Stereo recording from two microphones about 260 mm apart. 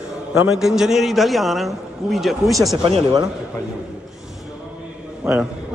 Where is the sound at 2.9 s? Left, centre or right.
Right.